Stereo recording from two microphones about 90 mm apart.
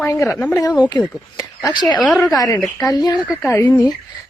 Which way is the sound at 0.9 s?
40° left (ahead or behind).